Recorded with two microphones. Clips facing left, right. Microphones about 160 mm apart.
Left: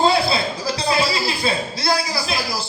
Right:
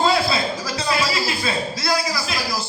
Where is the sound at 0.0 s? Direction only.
30° left (ahead or behind).